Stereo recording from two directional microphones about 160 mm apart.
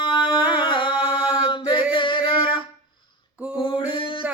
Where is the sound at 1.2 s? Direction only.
5° right (ahead or behind).